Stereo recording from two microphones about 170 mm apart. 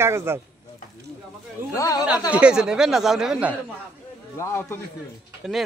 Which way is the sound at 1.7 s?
20° left (ahead or behind).